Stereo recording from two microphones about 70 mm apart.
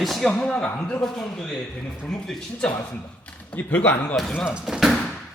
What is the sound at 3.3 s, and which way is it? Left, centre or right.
Speech, centre.